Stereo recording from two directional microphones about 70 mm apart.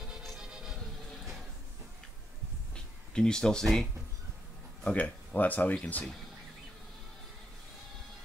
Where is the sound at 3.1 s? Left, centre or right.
Centre.